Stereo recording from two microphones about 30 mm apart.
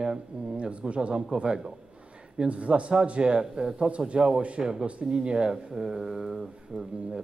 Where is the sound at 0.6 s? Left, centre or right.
Right.